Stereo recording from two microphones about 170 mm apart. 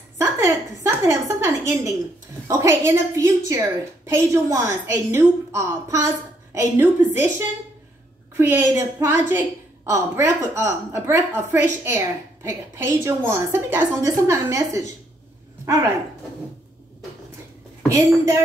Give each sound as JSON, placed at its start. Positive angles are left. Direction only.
{"t": 0.2, "sound": "a sound", "side_deg": -15}
{"t": 2.4, "sound": "a woman's voice", "side_deg": -20}
{"t": 17.8, "sound": "a woman's voice", "side_deg": -15}